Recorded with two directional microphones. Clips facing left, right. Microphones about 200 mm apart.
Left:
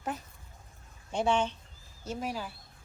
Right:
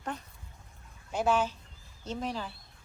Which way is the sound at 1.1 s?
5° right (ahead or behind).